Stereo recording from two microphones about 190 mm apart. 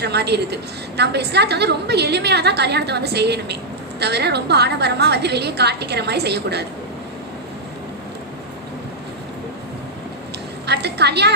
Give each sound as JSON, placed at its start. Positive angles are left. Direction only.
{"t": 0.0, "sound": "a woman's voice", "side_deg": -60}
{"t": 10.7, "sound": "a woman's voice", "side_deg": -60}